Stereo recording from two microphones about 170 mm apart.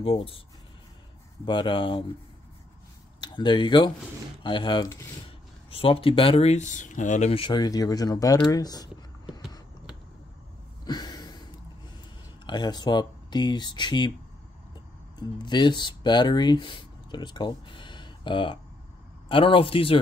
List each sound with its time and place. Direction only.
0.0 s speech: 35° left (ahead or behind)
1.4 s speech: 30° left (ahead or behind)
3.2 s speech: 25° left (ahead or behind)
10.9 s a sound: 25° left (ahead or behind)
12.4 s speech: 25° left (ahead or behind)
15.1 s speech: 25° left (ahead or behind)